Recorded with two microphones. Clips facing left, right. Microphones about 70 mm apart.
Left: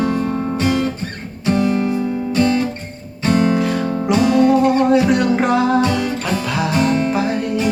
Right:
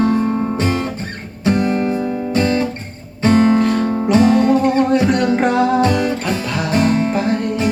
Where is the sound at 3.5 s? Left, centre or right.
Centre.